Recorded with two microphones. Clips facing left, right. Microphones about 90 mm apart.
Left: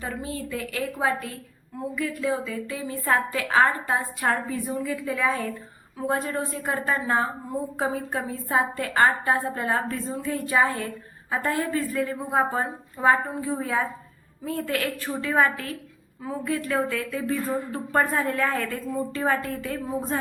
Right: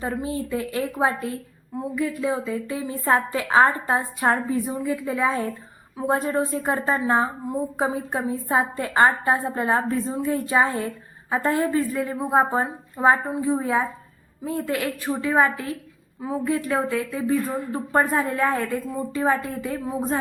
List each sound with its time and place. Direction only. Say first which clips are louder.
0.0 s a woman's voice: right 5 dB; 25° right (ahead or behind)